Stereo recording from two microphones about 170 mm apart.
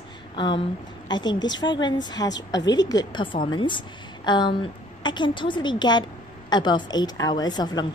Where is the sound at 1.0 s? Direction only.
25° left (ahead or behind).